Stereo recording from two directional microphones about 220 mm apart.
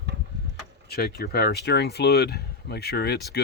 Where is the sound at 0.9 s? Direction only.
45° left (ahead or behind).